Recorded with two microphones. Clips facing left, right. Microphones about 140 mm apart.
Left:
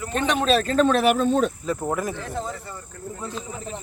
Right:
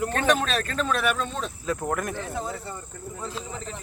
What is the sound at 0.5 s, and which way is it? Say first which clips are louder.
Speech: left 8 dB; 30° left (ahead or behind).